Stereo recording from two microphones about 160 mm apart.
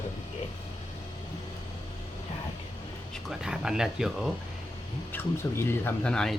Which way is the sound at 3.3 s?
5° right (ahead or behind).